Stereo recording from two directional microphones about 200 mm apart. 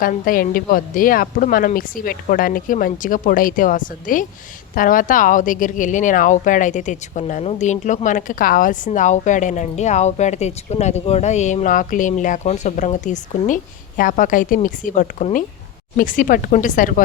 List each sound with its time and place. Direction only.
0.0 s a woman's voice: 45° left (ahead or behind)